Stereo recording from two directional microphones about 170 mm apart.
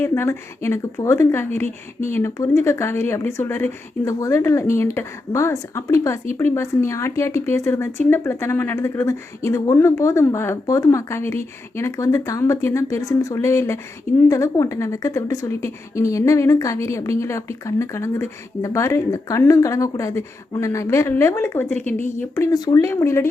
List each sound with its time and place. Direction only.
0.0 s speech: 15° left (ahead or behind)